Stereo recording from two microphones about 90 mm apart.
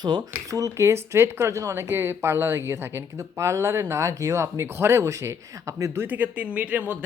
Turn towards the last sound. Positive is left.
turn(degrees=-20)  # may be behind; listen again after turning